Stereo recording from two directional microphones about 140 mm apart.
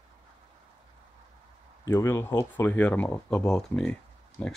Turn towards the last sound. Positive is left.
turn(degrees=10)  # may be behind; listen again after turning